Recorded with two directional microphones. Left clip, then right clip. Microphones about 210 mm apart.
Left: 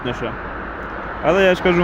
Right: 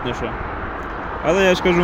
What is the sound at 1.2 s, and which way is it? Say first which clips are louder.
Speech: left 1 dB; 10° left (ahead or behind).